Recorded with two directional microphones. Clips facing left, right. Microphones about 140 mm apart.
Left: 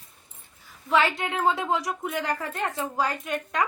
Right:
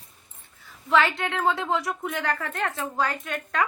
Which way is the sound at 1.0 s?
15° left (ahead or behind).